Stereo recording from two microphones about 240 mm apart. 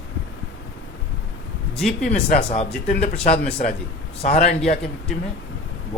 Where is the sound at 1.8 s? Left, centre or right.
Centre.